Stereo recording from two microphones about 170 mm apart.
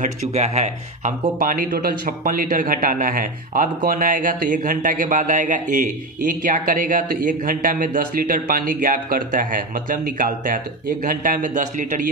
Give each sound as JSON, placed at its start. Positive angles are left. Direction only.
{"t": 0.0, "sound": "speech", "side_deg": -40}